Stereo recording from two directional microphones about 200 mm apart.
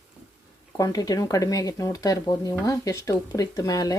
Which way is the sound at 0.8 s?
20° left (ahead or behind).